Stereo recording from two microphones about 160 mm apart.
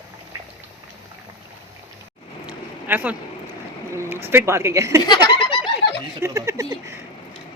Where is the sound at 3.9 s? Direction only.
15° right (ahead or behind).